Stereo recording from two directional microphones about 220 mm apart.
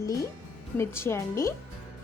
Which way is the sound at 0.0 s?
15° left (ahead or behind).